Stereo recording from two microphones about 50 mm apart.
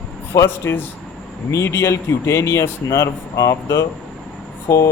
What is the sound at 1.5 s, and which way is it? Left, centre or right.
Speech, left.